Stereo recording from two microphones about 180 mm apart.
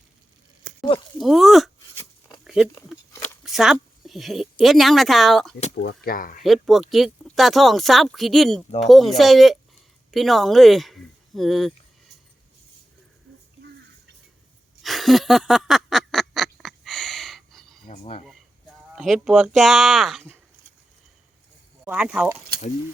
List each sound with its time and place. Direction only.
1.2 s speech: centre (ahead or behind)
2.4 s a sound: centre (ahead or behind)
3.4 s a woman's voice: centre (ahead or behind)
5.7 s speech: 70° left (ahead or behind); by 6.4 s 50° left (ahead or behind)
6.4 s speech: centre (ahead or behind)
14.8 s a sound: centre (ahead or behind)
18.0 s speech: 35° left (ahead or behind)
18.9 s speech: centre (ahead or behind)
21.8 s speech: 5° right (ahead or behind)